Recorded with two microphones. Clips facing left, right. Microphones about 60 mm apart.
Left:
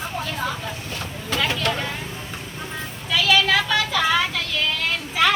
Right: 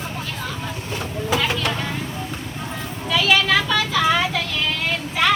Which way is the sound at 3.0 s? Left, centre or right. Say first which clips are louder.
Right 1 dB; centre.